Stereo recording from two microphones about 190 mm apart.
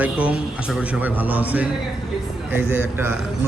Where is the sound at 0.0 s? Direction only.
5° right (ahead or behind).